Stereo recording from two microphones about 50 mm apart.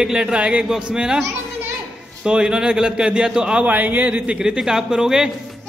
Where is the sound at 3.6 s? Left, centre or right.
Right.